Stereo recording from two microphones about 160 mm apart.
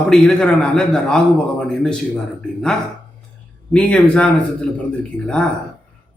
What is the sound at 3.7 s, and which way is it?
A man's voice, 5° left (ahead or behind).